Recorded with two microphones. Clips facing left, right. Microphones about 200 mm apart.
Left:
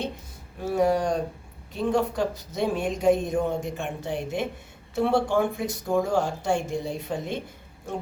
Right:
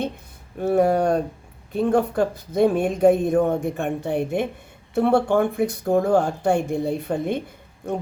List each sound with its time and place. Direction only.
0.6 s speech: 60° right (ahead or behind)